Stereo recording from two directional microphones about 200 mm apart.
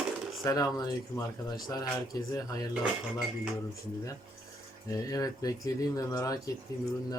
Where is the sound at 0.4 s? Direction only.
20° left (ahead or behind).